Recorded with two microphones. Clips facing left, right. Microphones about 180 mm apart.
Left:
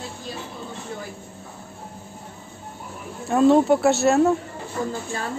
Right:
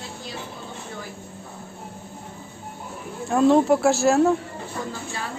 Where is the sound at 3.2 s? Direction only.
Centre (ahead or behind).